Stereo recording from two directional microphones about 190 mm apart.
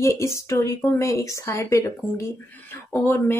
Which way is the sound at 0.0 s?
15° left (ahead or behind).